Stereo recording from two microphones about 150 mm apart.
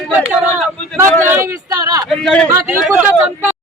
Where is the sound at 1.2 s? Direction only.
15° right (ahead or behind).